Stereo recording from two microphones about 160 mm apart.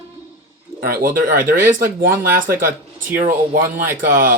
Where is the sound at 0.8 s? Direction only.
70° right (ahead or behind).